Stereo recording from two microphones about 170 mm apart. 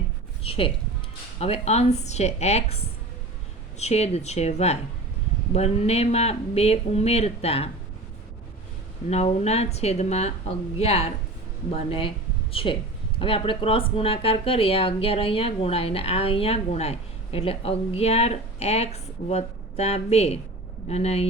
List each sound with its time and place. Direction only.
0.4 s a sound: 35° left (ahead or behind)
1.4 s speech: 40° left (ahead or behind)
9.0 s speech: 40° left (ahead or behind)